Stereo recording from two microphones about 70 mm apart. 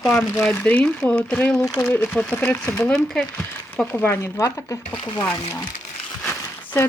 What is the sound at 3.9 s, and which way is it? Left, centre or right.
Speech, left.